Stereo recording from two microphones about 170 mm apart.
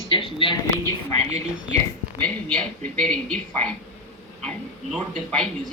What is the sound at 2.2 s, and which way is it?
Speech, 5° left (ahead or behind).